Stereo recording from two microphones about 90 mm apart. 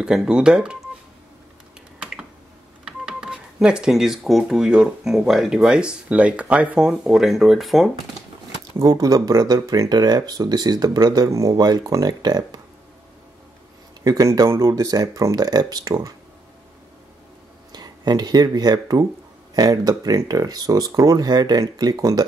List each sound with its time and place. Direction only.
0.0 s speech: 5° right (ahead or behind)
2.0 s finger snapping: 10° right (ahead or behind)
2.8 s speech: 10° right (ahead or behind)
8.8 s speech: 40° right (ahead or behind)
14.0 s speech: 45° right (ahead or behind)
17.7 s speech: 50° right (ahead or behind)